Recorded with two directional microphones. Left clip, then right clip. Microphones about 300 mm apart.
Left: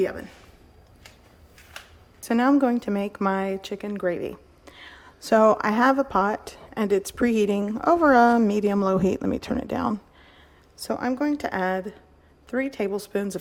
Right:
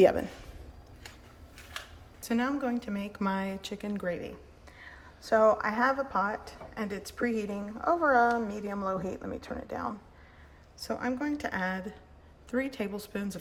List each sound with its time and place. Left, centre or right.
0.0 s speech: centre
2.2 s a woman's voice: centre